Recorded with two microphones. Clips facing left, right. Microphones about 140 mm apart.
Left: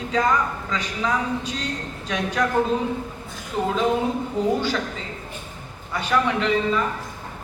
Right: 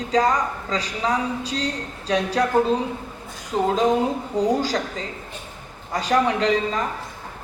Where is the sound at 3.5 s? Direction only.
35° right (ahead or behind).